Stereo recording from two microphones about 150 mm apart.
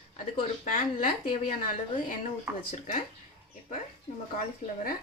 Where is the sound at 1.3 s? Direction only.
65° left (ahead or behind).